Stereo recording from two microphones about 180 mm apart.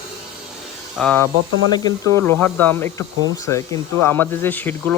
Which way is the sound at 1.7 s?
20° left (ahead or behind).